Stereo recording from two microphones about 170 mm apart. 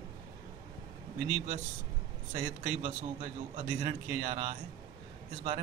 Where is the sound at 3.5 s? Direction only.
40° right (ahead or behind).